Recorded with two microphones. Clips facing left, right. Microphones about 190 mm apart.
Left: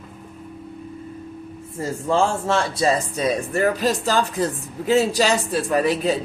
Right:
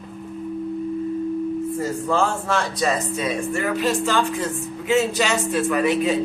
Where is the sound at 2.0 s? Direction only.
30° left (ahead or behind).